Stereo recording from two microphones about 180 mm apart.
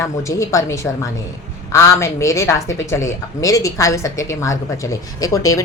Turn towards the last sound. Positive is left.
turn(degrees=15)  # may be behind; listen again after turning